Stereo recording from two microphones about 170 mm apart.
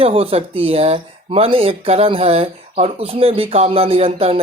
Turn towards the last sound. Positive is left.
turn(degrees=-35)  # may be behind; listen again after turning